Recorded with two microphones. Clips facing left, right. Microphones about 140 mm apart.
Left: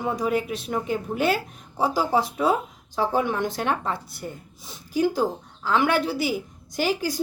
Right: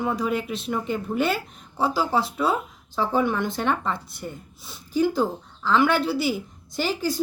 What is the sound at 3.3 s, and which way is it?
Speech, 45° left (ahead or behind).